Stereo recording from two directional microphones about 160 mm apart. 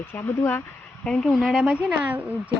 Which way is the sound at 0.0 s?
15° left (ahead or behind).